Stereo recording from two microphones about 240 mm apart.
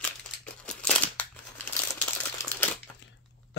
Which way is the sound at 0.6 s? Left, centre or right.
Centre.